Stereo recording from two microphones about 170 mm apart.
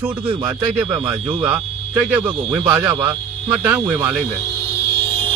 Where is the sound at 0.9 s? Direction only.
30° right (ahead or behind).